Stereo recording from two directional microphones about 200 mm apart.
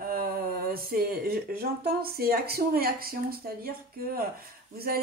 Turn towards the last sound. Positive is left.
turn(degrees=-50)  # may be behind; listen again after turning